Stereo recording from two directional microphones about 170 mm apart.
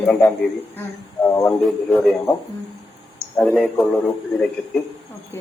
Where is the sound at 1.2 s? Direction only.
20° left (ahead or behind).